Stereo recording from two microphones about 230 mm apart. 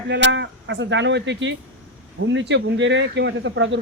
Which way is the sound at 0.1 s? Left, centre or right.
Right.